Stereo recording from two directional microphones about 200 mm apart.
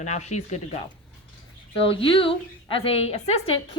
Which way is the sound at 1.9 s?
25° left (ahead or behind).